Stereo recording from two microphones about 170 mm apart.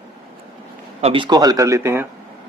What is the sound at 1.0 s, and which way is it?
A man's voice, 35° right (ahead or behind).